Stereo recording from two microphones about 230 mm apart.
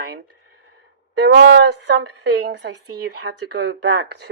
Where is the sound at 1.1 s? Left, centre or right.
Right.